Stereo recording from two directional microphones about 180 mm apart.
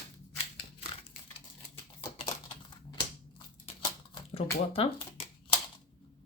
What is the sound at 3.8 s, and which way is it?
Typewriter, 25° left (ahead or behind).